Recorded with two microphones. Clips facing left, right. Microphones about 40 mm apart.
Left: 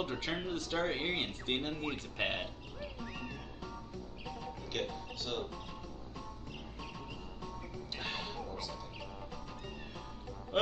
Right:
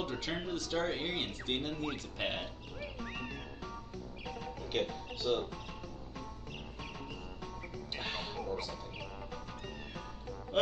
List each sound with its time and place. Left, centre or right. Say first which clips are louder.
0.0 s a sound: even; centre
0.5 s speech: right 1 dB; left
0.9 s speech: left 1 dB; centre
5.2 s speech: right 7 dB; centre
8.0 s music: right 1 dB; centre